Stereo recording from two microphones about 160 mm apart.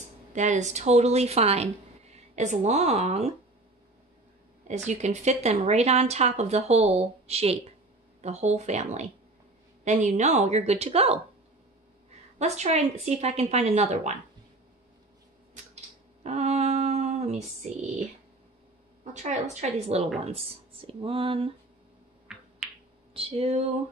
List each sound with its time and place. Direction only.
0.3 s speech: 50° right (ahead or behind)
4.6 s a woman's voice: 45° right (ahead or behind)
12.4 s speech: 45° right (ahead or behind)
15.5 s a sound: 45° right (ahead or behind)
19.1 s a woman's voice: 45° right (ahead or behind)
22.3 s finger snapping: 5° right (ahead or behind)
23.1 s a woman's voice: 35° right (ahead or behind)